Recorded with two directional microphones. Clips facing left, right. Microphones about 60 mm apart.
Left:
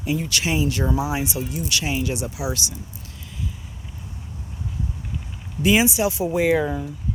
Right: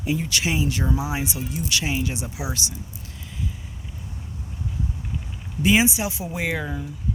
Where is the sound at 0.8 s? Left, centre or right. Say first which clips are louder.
Left 3 dB; centre.